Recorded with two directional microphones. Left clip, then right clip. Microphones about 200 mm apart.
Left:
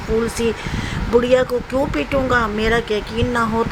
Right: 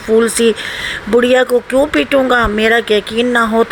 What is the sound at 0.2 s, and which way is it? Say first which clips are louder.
Speech: right 8 dB; 25° right (ahead or behind).